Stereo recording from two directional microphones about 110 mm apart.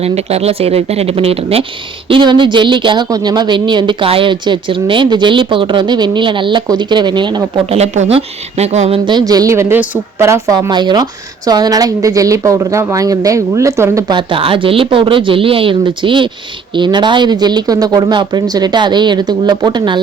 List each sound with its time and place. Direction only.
0.0 s speech: 70° right (ahead or behind)
2.0 s a woman's voice: 50° right (ahead or behind)
7.7 s a woman's voice: 80° right
9.0 s a woman's voice: 40° right (ahead or behind); by 10.7 s 25° right (ahead or behind)
10.7 s speech: 40° right (ahead or behind); by 14.0 s 25° right (ahead or behind)
14.1 s a woman's voice: 50° right (ahead or behind)